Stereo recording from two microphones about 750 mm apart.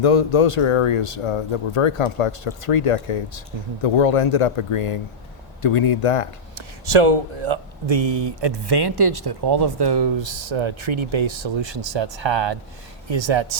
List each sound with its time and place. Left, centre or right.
0.0 s speech: left
6.6 s speech: right